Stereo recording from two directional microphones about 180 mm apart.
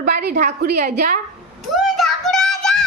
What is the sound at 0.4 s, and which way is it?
Speech, 60° right (ahead or behind).